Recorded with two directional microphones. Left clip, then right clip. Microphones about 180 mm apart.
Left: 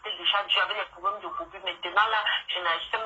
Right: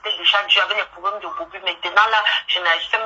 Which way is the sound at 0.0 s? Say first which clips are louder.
Right 9 dB; 30° right (ahead or behind).